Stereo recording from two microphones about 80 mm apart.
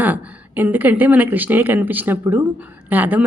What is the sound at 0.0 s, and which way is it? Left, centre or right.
A woman's voice, right.